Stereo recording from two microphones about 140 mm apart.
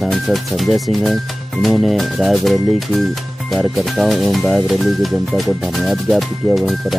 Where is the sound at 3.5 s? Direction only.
Centre (ahead or behind).